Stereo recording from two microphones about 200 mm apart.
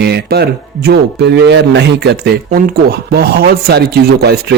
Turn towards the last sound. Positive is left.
turn(degrees=-55)  # may be behind; listen again after turning